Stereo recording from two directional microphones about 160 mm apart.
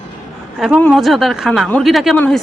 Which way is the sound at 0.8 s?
Centre (ahead or behind).